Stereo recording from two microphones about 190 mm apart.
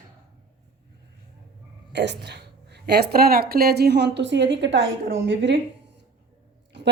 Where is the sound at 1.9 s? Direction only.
65° right (ahead or behind).